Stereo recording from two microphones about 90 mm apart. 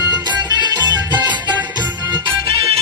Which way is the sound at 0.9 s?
55° right (ahead or behind).